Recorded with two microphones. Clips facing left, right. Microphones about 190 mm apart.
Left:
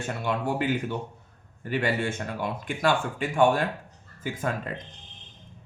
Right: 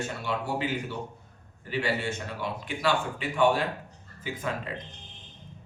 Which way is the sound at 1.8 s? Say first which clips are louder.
Left 1 dB; 50° left (ahead or behind).